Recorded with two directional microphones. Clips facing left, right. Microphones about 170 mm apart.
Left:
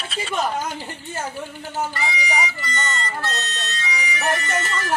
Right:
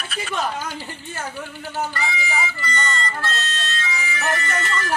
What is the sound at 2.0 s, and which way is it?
Music, 20° left (ahead or behind).